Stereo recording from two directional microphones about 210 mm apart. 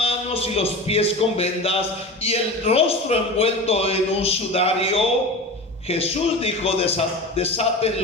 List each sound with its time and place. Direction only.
0.0 s a man's voice: 30° left (ahead or behind)